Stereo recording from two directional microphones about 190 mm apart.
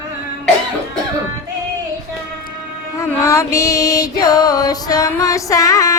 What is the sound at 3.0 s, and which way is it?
Music, 15° left (ahead or behind).